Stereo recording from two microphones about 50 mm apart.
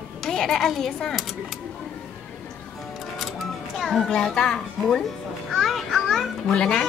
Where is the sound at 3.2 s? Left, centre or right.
Centre.